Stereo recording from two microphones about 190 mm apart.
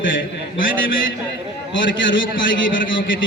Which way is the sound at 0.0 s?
80° left.